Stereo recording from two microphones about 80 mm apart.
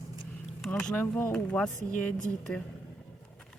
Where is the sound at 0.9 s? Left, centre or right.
Left.